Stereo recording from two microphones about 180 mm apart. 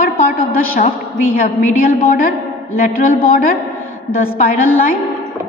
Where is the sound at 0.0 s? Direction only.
55° left (ahead or behind).